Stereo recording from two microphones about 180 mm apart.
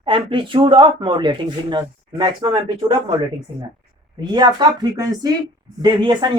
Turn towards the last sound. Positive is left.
turn(degrees=-25)  # may be behind; listen again after turning